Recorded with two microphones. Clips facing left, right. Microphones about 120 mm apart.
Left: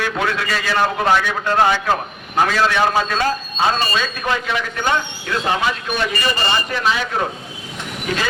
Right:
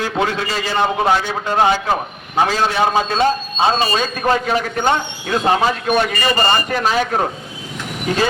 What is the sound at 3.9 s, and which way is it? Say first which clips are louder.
A man's voice: right 4 dB; 40° right (ahead or behind).